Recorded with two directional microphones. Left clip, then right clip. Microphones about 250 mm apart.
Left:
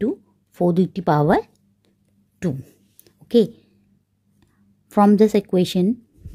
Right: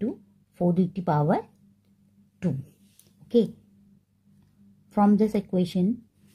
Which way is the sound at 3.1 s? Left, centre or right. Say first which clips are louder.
Left 6 dB; left.